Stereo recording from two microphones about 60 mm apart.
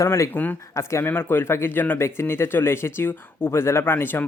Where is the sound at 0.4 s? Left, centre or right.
Left.